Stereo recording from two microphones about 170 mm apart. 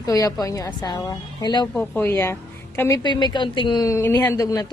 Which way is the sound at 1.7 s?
10° left (ahead or behind).